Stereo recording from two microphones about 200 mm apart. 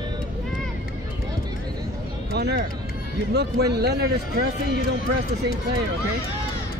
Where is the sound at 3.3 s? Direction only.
55° right (ahead or behind).